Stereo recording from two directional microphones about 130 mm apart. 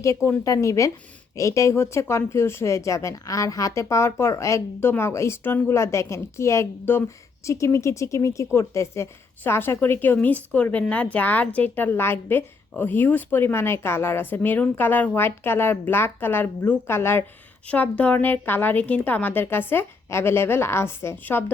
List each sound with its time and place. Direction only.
0.0 s a woman's voice: 20° left (ahead or behind)